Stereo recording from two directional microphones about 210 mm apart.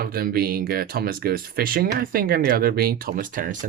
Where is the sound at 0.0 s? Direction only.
45° right (ahead or behind).